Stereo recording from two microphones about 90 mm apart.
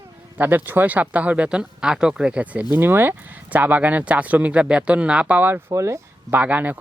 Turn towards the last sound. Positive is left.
turn(degrees=-20)  # may be behind; listen again after turning